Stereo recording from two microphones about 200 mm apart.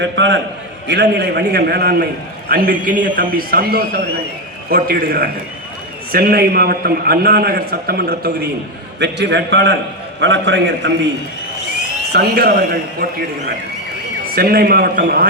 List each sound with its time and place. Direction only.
0.0 s a man's voice: 65° right (ahead or behind)
12.1 s a man's voice: 50° right (ahead or behind)
14.3 s a man's voice: 50° right (ahead or behind)